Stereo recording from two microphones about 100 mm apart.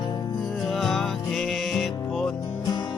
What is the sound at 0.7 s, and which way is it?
Music, 5° left (ahead or behind).